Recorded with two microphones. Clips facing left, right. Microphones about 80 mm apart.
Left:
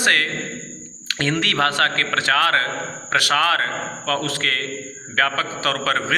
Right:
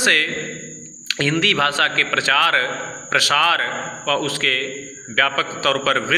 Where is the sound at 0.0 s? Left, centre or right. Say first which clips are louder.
Even; left.